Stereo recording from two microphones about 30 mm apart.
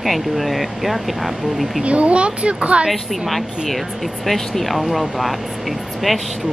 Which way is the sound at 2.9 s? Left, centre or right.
Centre.